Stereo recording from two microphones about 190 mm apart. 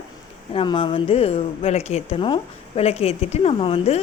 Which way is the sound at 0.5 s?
30° left (ahead or behind).